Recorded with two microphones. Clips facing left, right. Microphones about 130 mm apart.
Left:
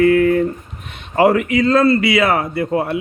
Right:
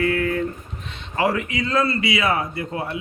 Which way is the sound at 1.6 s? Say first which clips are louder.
Left 8 dB; 65° left (ahead or behind).